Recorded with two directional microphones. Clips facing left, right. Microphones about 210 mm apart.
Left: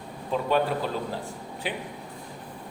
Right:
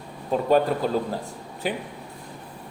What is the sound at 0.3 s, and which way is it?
Speech, 40° right (ahead or behind).